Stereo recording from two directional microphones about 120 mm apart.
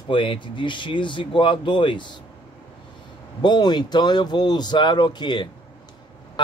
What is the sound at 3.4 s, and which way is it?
A man's voice, 35° left (ahead or behind).